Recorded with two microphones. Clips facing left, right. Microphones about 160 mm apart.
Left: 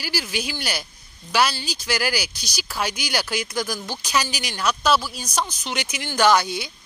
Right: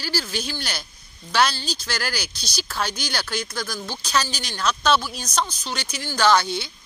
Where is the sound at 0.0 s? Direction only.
15° left (ahead or behind).